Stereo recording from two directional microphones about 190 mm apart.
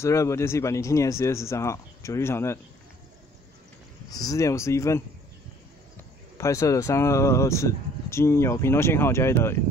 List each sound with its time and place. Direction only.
0.0 s speech: 15° left (ahead or behind)
4.1 s speech: 20° left (ahead or behind)
6.3 s speech: 15° left (ahead or behind)